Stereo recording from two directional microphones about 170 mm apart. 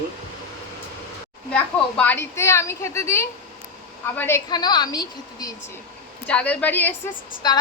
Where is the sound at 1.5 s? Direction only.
10° left (ahead or behind).